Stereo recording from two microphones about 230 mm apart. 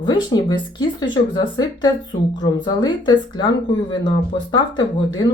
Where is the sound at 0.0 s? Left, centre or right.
Centre.